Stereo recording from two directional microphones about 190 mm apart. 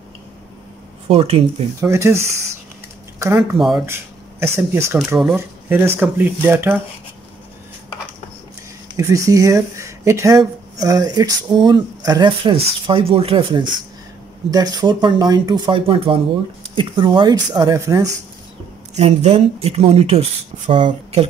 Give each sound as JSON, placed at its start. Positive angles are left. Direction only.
{"t": 1.0, "sound": "speech", "side_deg": -30}
{"t": 1.8, "sound": "speech", "side_deg": -15}
{"t": 3.3, "sound": "speech", "side_deg": 0}
{"t": 3.8, "sound": "speech", "side_deg": -10}
{"t": 8.9, "sound": "speech", "side_deg": -15}
{"t": 18.9, "sound": "speech", "side_deg": -35}